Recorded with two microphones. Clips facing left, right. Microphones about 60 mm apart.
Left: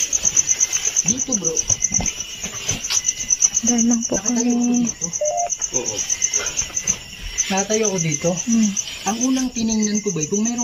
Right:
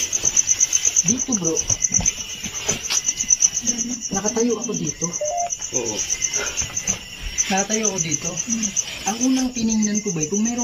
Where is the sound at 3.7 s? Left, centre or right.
Left.